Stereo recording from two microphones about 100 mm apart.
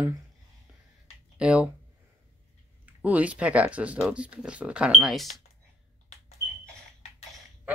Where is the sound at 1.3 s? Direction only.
10° right (ahead or behind).